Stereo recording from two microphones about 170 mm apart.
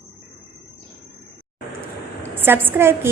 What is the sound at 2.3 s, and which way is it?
Speech, 10° right (ahead or behind).